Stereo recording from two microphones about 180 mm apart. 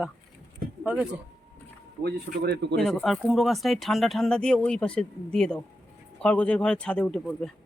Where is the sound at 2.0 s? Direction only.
65° right (ahead or behind).